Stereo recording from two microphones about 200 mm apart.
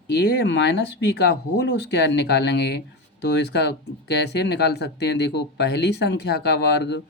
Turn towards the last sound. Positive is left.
turn(degrees=60)  # may be behind; listen again after turning